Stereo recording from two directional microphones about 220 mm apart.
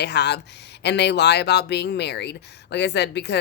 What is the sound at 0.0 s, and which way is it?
A woman's voice, 50° left (ahead or behind).